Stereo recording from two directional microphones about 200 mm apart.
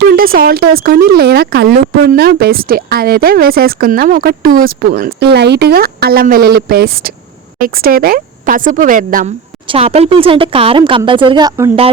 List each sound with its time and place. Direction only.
0.0 s speech: 50° right (ahead or behind)
9.6 s speech: 30° right (ahead or behind)